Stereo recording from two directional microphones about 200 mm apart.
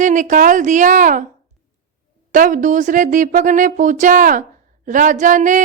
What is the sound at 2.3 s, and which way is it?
A woman's voice, 40° right (ahead or behind).